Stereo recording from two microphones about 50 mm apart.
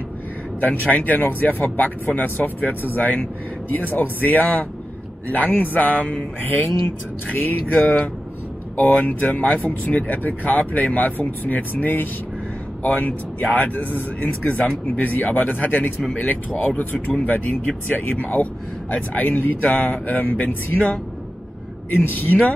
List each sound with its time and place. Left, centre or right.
0.6 s speech: left